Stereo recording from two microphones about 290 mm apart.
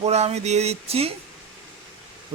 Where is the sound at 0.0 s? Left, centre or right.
Right.